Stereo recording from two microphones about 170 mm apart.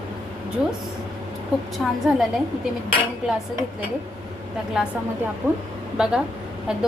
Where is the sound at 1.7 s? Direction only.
Centre (ahead or behind).